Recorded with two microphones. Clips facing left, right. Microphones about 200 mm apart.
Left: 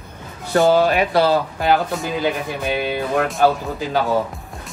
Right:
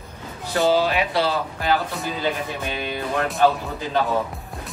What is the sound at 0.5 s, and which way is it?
Speech, 55° left (ahead or behind).